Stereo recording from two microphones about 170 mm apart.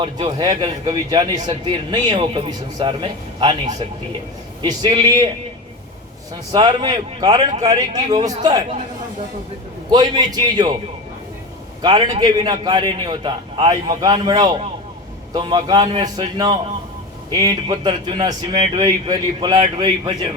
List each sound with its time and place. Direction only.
0.0 s speech: 25° right (ahead or behind)
6.5 s speech: 25° right (ahead or behind)
9.9 s speech: 25° right (ahead or behind)
11.8 s speech: 25° right (ahead or behind)